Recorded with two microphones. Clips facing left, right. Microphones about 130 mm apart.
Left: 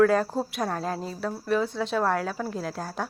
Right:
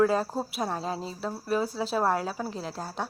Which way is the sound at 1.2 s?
35° right (ahead or behind).